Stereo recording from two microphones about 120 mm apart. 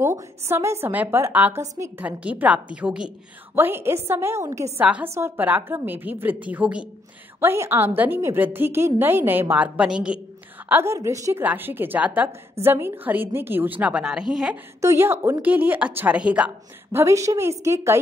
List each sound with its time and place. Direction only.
0.0 s a woman's voice: 25° right (ahead or behind)
2.0 s a woman's voice: 10° right (ahead or behind)
3.5 s a woman's voice: 20° right (ahead or behind)
7.3 s a woman's voice: 20° right (ahead or behind)
10.7 s a woman's voice: 20° right (ahead or behind); by 14.6 s 5° right (ahead or behind)
14.8 s a woman's voice: 20° right (ahead or behind)
16.9 s a woman's voice: 25° right (ahead or behind)